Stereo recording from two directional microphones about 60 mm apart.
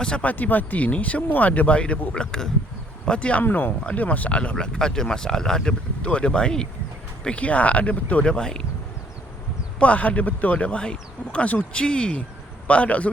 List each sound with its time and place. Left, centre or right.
0.0 s speech: left
3.4 s speech: left; by 8.6 s centre
9.8 s speech: left